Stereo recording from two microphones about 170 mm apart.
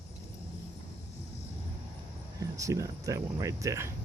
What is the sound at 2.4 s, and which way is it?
Speech, 20° right (ahead or behind).